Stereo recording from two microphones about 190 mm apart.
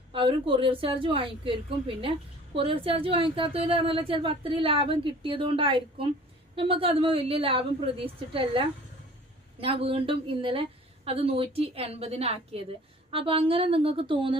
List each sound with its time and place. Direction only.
0.1 s a woman's voice: 25° right (ahead or behind)